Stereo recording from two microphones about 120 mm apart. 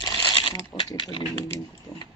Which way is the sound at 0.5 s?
30° left (ahead or behind).